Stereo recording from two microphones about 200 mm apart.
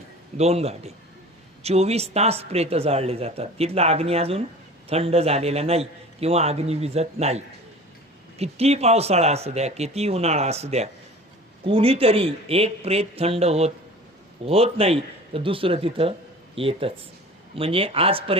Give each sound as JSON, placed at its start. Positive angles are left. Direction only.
{"t": 0.3, "sound": "speech", "side_deg": -30}